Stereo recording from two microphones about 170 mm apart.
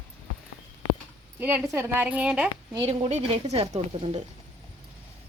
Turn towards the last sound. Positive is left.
turn(degrees=-40)  # may be behind; listen again after turning